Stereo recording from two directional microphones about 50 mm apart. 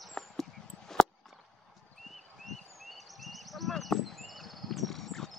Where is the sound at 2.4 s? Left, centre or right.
Centre.